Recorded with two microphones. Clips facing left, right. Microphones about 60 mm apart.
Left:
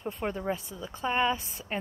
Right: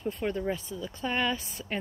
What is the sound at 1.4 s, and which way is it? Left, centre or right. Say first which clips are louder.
Speech: right 2 dB; right.